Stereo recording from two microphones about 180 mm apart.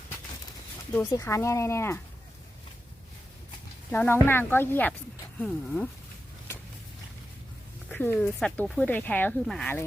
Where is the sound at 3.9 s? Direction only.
10° left (ahead or behind).